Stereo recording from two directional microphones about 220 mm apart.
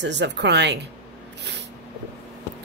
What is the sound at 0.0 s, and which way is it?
Speech, 50° right (ahead or behind).